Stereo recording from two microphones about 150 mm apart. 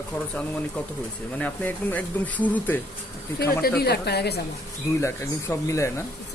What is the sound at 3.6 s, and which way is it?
Speech, 90° left.